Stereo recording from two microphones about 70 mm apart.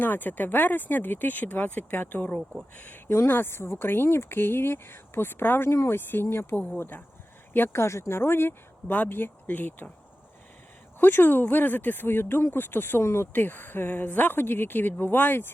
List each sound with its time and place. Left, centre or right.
0.0 s speech: left
11.0 s speech: left